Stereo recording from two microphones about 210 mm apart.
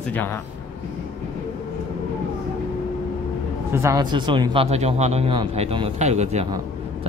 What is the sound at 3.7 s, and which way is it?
Speech, 15° right (ahead or behind).